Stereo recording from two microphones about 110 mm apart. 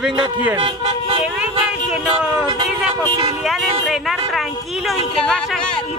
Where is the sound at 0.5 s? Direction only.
55° right (ahead or behind).